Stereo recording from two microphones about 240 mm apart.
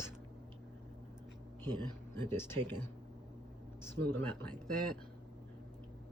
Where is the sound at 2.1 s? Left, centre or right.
Centre.